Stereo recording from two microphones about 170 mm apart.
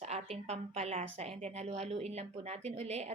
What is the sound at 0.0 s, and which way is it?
A woman's voice, 40° right (ahead or behind).